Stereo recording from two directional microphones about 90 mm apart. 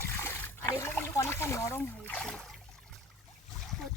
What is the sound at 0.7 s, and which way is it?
Speech, 30° left (ahead or behind).